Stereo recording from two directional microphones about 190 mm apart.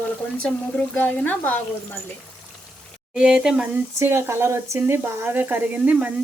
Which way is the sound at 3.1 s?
5° right (ahead or behind).